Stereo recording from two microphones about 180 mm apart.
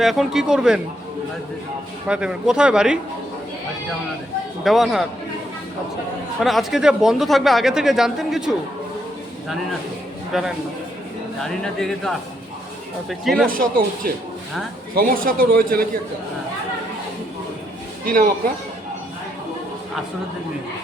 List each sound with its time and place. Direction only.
0.0 s speech: centre (ahead or behind)
2.0 s speech: 5° right (ahead or behind)
4.6 s speech: centre (ahead or behind)
6.4 s speech: centre (ahead or behind)
10.3 s speech: centre (ahead or behind)
13.5 s a man's voice: 50° right (ahead or behind)